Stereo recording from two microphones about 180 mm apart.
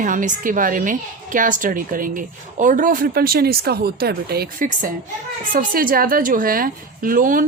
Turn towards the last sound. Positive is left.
turn(degrees=-50)  # may be behind; listen again after turning